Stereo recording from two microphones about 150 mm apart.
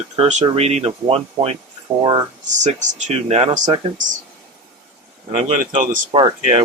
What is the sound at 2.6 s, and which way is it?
Speech, 50° right (ahead or behind).